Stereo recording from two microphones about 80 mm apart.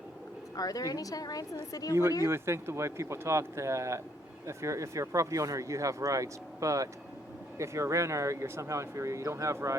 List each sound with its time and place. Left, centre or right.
0.5 s a woman's voice: left
2.2 s speech: right